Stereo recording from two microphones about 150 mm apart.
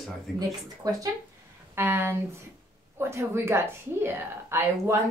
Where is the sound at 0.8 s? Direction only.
25° right (ahead or behind).